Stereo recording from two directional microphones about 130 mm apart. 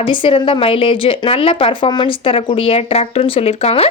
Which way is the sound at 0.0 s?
40° left (ahead or behind).